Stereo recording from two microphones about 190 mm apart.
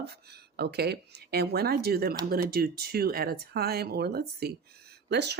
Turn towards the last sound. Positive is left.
turn(degrees=-60)  # may be behind; listen again after turning